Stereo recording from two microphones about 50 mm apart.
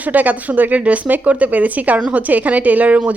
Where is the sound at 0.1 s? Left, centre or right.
Right.